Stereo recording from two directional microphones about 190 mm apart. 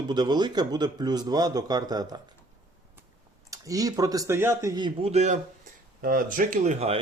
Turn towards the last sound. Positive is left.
turn(degrees=-35)  # may be behind; listen again after turning